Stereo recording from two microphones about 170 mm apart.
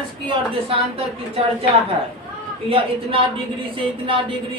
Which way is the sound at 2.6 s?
30° right (ahead or behind).